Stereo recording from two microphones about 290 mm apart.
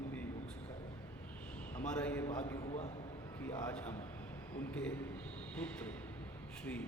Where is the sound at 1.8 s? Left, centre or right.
Centre.